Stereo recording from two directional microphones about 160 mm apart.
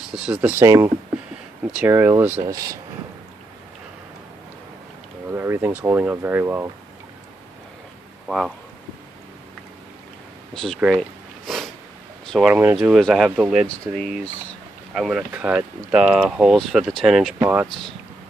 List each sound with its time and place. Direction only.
0.1 s speech: 5° right (ahead or behind); by 2.8 s 20° right (ahead or behind)
5.3 s speech: 15° right (ahead or behind)
8.3 s speech: centre (ahead or behind)
10.5 s speech: 5° left (ahead or behind)
10.8 s a sound: centre (ahead or behind)
12.3 s speech: 5° right (ahead or behind)